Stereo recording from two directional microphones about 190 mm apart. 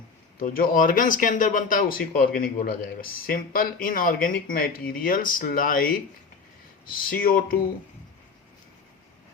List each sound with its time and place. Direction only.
0.3 s speech: 50° left (ahead or behind)